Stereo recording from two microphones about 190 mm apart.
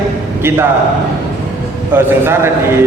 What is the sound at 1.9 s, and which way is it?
Speech, 10° right (ahead or behind).